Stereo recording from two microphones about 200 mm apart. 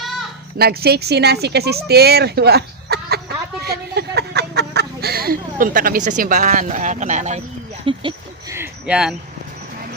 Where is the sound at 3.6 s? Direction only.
55° right (ahead or behind); by 7.4 s 35° right (ahead or behind).